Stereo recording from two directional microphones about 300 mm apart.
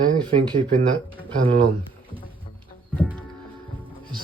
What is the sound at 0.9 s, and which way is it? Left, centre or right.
Speech, centre.